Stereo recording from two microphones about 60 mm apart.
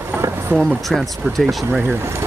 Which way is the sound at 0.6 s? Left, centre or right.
Centre.